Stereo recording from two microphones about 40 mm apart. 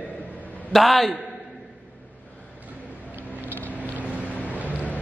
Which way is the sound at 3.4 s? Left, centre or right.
Left.